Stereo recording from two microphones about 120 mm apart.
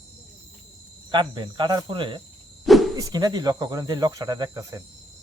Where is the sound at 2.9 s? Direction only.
30° right (ahead or behind).